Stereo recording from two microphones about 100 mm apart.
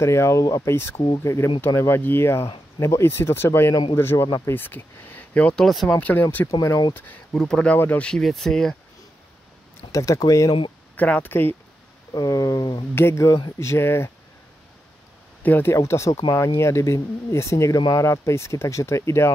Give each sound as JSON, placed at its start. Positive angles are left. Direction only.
{"t": 0.0, "sound": "speech", "side_deg": 30}
{"t": 5.7, "sound": "speech", "side_deg": 0}
{"t": 5.9, "sound": "speech", "side_deg": 15}
{"t": 7.3, "sound": "speech", "side_deg": 5}
{"t": 8.1, "sound": "speech", "side_deg": 0}
{"t": 9.9, "sound": "speech", "side_deg": 35}
{"t": 11.0, "sound": "speech", "side_deg": 15}
{"t": 12.1, "sound": "speech", "side_deg": 35}
{"t": 12.9, "sound": "speech", "side_deg": 25}
{"t": 15.4, "sound": "speech", "side_deg": 20}
{"t": 15.7, "sound": "speech", "side_deg": 30}